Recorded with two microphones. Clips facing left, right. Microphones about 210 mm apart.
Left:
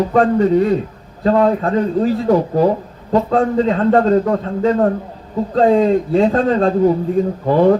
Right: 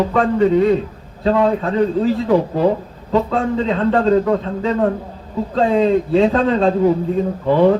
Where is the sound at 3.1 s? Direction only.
45° left (ahead or behind).